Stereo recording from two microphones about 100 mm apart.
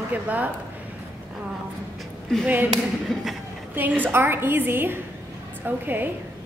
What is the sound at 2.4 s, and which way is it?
Speech, 15° right (ahead or behind).